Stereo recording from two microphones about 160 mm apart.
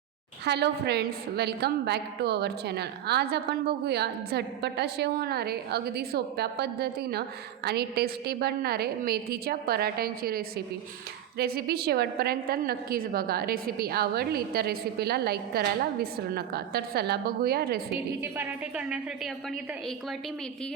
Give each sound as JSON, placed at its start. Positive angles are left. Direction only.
{"t": 0.4, "sound": "a woman's voice", "side_deg": -90}
{"t": 18.2, "sound": "speech", "side_deg": -10}